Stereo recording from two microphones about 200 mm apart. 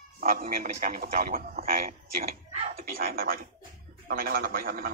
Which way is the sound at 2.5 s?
35° right (ahead or behind).